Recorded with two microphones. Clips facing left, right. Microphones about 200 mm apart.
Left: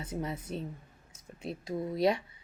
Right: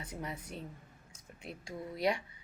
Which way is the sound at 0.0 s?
25° left (ahead or behind).